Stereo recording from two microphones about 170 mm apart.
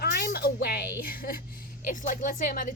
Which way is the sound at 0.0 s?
65° left (ahead or behind).